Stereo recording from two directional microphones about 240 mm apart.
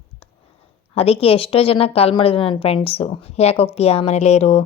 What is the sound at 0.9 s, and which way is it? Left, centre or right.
A woman's voice, left.